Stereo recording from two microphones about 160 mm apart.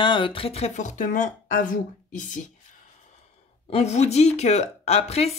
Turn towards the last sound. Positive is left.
turn(degrees=40)  # may be behind; listen again after turning